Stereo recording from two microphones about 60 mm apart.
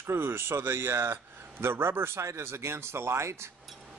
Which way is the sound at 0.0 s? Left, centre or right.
Right.